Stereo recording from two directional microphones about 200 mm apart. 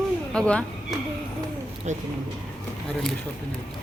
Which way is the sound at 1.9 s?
35° right (ahead or behind).